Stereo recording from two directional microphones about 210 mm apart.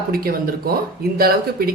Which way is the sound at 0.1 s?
45° right (ahead or behind).